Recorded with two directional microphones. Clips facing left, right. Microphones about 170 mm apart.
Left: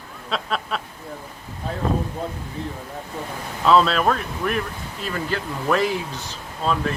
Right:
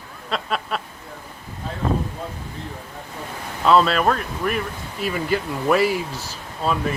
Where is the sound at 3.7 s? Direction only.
Centre (ahead or behind).